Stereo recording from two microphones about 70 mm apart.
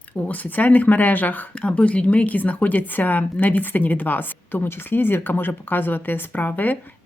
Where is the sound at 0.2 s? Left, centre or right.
Left.